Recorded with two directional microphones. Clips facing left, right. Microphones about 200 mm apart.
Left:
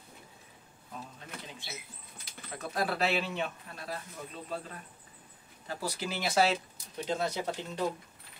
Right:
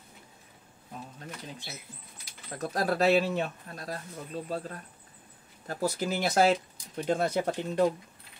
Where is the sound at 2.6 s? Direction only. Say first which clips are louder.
Right 4 dB; 40° right (ahead or behind).